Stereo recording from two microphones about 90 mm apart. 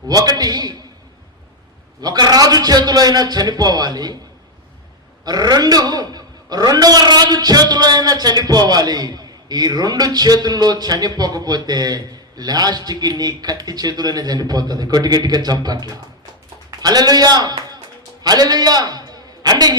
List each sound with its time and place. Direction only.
0.1 s a man's voice: 45° right (ahead or behind)
2.0 s a man's voice: 50° right (ahead or behind)
5.2 s a man's voice: 50° right (ahead or behind)
18.2 s a sound: 45° right (ahead or behind)